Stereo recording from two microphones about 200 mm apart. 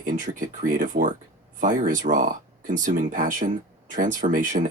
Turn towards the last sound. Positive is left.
turn(degrees=-40)  # may be behind; listen again after turning